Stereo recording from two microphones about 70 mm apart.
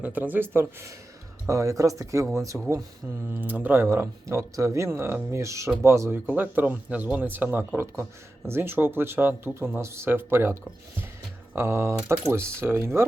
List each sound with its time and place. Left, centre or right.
0.0 s speech: right
2.5 s speech: right
3.8 s speech: right
6.2 s speech: right